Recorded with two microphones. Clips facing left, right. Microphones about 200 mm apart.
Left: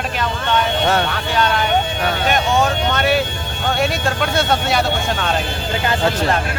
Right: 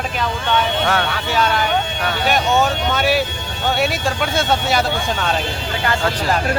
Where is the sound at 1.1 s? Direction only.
Centre (ahead or behind).